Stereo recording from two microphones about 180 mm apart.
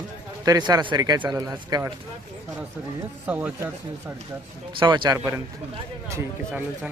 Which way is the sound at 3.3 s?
5° right (ahead or behind).